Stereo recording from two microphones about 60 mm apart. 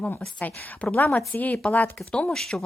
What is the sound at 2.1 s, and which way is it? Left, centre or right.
Speech, centre.